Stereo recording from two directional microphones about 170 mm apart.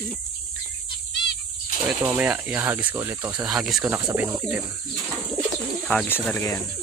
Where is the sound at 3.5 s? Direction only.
Centre (ahead or behind).